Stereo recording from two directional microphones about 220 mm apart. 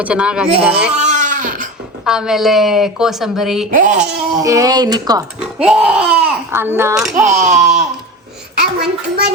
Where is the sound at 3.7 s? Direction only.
35° right (ahead or behind).